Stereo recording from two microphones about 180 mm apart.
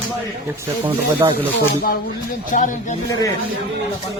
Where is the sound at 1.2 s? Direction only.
20° right (ahead or behind).